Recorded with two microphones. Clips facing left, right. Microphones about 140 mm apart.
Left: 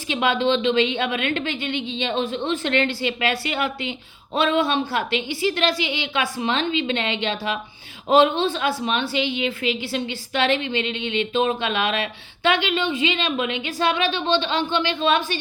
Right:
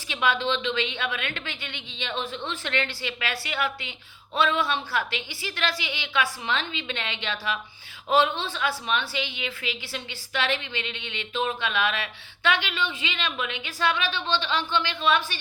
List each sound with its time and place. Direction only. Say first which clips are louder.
0.1 s a woman's voice: left 5 dB; 20° left (ahead or behind)